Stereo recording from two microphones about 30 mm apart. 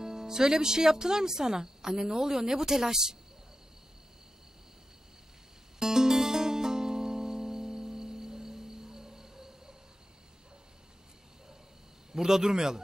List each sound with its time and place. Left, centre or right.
0.0 s speech: right
5.8 s music: centre
12.1 s a man's voice: centre